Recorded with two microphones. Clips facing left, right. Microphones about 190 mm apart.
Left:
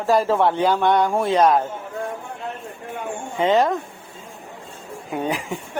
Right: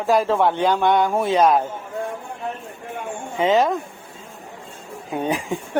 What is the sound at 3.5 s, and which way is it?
Speech, centre (ahead or behind).